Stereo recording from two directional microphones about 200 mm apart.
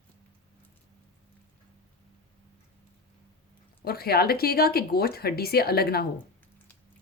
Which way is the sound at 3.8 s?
50° left (ahead or behind).